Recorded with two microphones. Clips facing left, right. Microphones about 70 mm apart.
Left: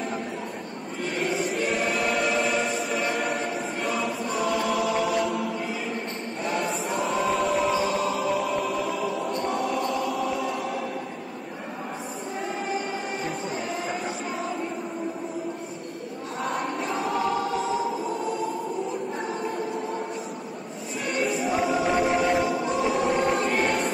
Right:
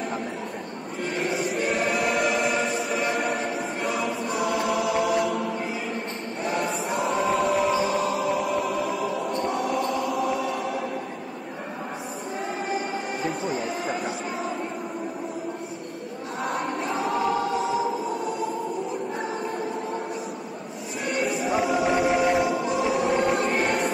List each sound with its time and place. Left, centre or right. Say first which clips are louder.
1.0 s music: even; right
1.9 s choir: right 1 dB; centre
2.6 s music: right 1 dB; centre
4.0 s choir: right 1 dB; centre
6.5 s choir: right 1 dB; centre
8.6 s choir: right 1 dB; right
9.0 s choir: right 1 dB; centre
13.5 s a sound: right 2 dB; centre
16.4 s choir: right 1 dB; centre
21.1 s music: even; centre
23.0 s choir: right 1 dB; centre
23.6 s music: even; centre